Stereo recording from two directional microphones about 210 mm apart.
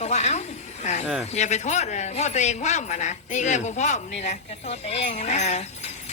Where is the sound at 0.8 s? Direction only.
35° left (ahead or behind).